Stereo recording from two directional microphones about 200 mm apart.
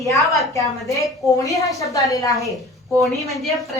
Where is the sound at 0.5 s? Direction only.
15° left (ahead or behind).